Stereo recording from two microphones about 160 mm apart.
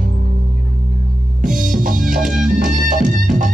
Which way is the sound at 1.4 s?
55° right (ahead or behind).